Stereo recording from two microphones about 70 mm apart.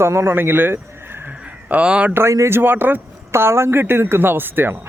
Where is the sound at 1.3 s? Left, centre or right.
Centre.